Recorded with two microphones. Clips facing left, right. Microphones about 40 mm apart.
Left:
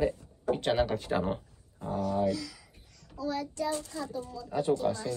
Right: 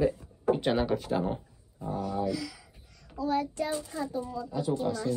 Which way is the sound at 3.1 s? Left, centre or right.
Right.